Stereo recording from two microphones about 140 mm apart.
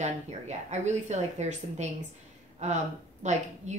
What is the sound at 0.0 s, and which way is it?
A woman's voice, 55° right (ahead or behind).